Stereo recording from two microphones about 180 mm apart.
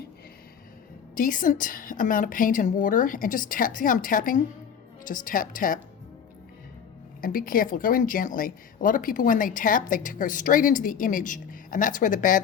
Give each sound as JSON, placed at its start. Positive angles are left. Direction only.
{"t": 1.1, "sound": "a woman's voice", "side_deg": 50}
{"t": 7.2, "sound": "a woman's voice", "side_deg": 50}